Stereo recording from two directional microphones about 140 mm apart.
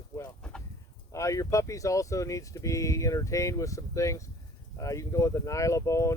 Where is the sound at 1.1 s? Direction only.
20° left (ahead or behind).